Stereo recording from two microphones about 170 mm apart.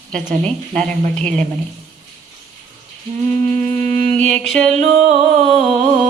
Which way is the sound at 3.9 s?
45° right (ahead or behind).